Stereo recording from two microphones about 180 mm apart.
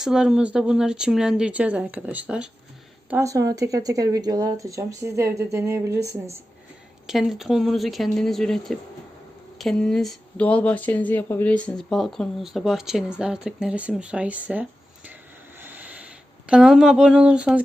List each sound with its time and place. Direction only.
0.0 s speech: centre (ahead or behind)
7.1 s speech: centre (ahead or behind)